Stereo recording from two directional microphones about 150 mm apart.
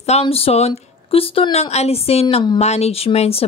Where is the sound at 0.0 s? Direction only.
45° left (ahead or behind).